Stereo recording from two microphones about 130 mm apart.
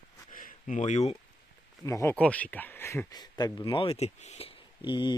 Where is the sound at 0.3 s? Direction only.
80° left; by 1.1 s 60° left (ahead or behind).